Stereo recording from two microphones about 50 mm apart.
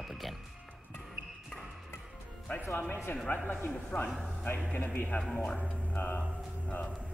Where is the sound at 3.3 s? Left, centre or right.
Left.